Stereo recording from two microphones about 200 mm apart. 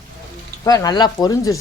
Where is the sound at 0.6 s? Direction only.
20° left (ahead or behind).